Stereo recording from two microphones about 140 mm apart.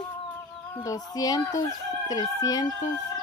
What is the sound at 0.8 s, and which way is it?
Speech, 25° left (ahead or behind).